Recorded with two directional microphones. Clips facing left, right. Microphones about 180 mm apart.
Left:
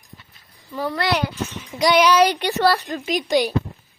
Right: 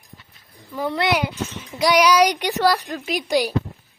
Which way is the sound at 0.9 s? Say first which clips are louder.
Right 1 dB; 20° right (ahead or behind).